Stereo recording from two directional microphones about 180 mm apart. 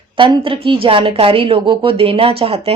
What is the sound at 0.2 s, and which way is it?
A woman's voice, 30° right (ahead or behind).